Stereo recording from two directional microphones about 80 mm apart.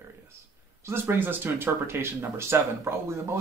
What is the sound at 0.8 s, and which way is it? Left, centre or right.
Speech, right.